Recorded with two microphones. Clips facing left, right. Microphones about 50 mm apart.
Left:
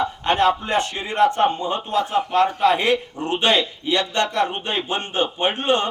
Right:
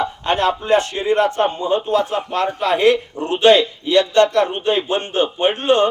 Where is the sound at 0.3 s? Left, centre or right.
Centre.